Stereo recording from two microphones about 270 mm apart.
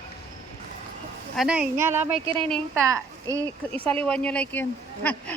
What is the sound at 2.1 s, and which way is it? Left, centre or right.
Speech, right.